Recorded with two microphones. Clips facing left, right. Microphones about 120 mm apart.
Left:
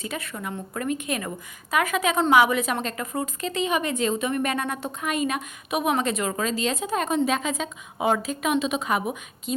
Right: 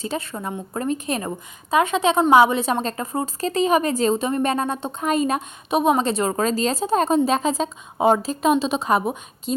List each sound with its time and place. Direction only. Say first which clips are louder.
0.0 s a woman's voice: right 5 dB; 30° right (ahead or behind)